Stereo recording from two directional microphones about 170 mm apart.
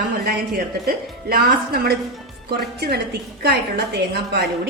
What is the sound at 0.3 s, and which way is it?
A woman's voice, 60° right (ahead or behind).